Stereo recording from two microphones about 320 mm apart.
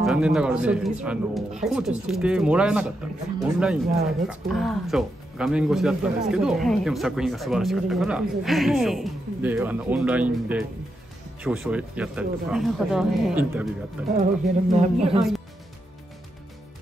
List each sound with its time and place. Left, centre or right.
0.0 s speech: centre
14.8 s speech: right